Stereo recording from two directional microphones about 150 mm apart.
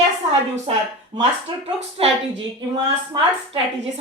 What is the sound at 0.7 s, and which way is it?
Speech, 35° right (ahead or behind).